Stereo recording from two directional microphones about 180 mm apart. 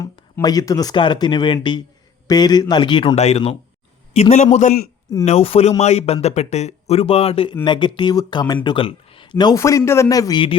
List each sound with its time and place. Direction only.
0.0 s a man's voice: 20° left (ahead or behind)